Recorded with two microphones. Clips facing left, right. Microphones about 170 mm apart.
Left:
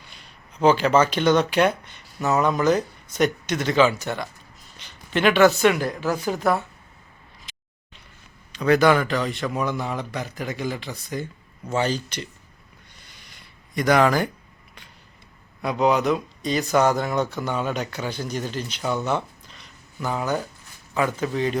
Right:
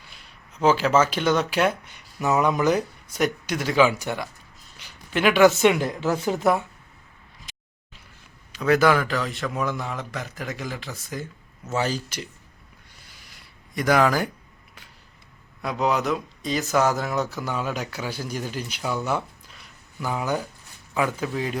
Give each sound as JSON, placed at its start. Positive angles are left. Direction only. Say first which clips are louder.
{"t": 0.0, "sound": "speech", "louder": "left 1 dB", "side_deg": -5}
{"t": 4.8, "sound": "a sound", "louder": "left 1 dB", "side_deg": -10}
{"t": 5.5, "sound": "speech", "louder": "even", "side_deg": -20}
{"t": 8.5, "sound": "speech", "louder": "left 2 dB", "side_deg": -5}
{"t": 13.0, "sound": "a sound", "louder": "even", "side_deg": -5}
{"t": 15.6, "sound": "a man's voice", "louder": "left 4 dB", "side_deg": 0}